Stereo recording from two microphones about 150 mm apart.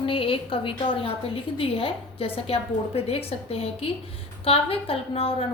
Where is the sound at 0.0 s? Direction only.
35° left (ahead or behind).